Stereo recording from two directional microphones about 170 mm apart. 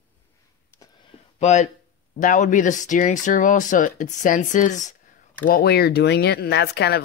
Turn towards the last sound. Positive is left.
turn(degrees=70)  # may be behind; listen again after turning